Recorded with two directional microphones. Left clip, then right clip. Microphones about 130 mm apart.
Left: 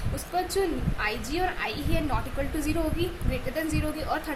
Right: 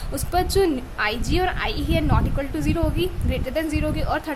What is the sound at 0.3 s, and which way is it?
A woman's voice, 45° right (ahead or behind).